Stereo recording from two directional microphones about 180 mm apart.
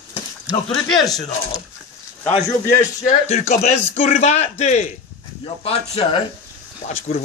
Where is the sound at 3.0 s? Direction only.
35° left (ahead or behind).